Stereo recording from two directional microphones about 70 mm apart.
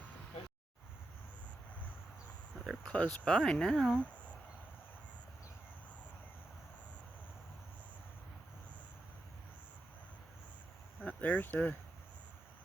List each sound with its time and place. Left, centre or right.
2.6 s speech: centre
3.9 s a sound: centre
11.0 s speech: left